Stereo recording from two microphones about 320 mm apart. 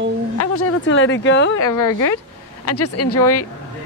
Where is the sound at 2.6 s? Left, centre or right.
Left.